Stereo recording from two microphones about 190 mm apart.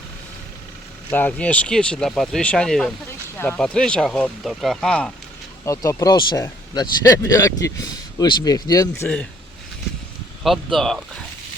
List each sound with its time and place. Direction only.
1.1 s speech: 10° left (ahead or behind)
5.6 s speech: 15° left (ahead or behind)
10.4 s speech: centre (ahead or behind)